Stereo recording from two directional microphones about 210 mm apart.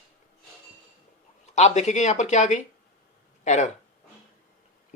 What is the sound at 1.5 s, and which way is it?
Speech, 35° left (ahead or behind).